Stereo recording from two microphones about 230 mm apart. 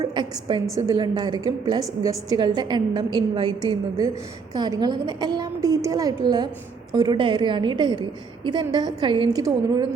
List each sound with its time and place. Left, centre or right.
0.0 s a woman's voice: centre